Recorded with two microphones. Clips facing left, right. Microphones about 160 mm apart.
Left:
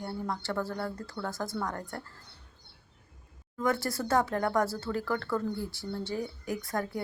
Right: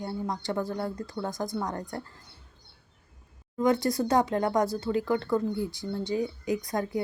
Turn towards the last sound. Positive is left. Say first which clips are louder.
# right 4 dB
turn(degrees=-15)  # may be behind; listen again after turning